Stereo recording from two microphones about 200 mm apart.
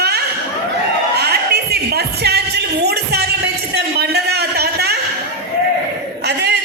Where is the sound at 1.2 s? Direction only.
50° right (ahead or behind).